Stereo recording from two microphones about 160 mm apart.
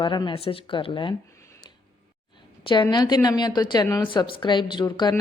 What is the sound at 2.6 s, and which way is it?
A woman's voice, 30° left (ahead or behind).